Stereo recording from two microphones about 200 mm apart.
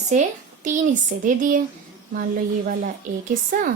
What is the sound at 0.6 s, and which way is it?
Speech, 40° right (ahead or behind).